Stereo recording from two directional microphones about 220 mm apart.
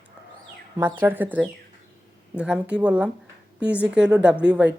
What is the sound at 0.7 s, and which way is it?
A woman's voice, 10° right (ahead or behind).